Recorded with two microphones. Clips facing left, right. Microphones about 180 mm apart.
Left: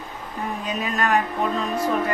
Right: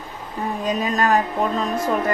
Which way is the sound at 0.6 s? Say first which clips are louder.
Right 4 dB; 40° right (ahead or behind).